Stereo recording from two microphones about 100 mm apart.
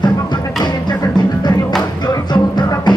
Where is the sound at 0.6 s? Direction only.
45° left (ahead or behind).